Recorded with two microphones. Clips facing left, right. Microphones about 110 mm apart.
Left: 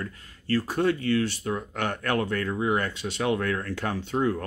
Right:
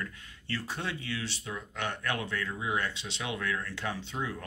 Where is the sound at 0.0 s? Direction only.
45° left (ahead or behind).